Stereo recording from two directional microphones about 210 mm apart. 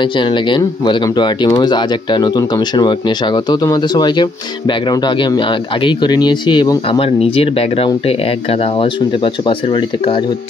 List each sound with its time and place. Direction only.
0.0 s speech: 25° left (ahead or behind)